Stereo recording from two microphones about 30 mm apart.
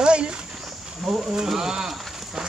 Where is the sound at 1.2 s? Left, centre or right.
Centre.